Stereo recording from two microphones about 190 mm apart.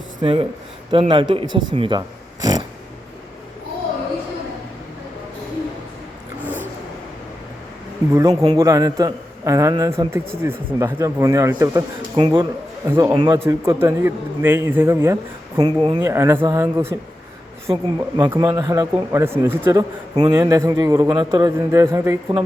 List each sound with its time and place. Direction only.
0.2 s speech: 30° right (ahead or behind)
6.4 s vehicle: 10° right (ahead or behind)
8.1 s a man's voice: 20° right (ahead or behind)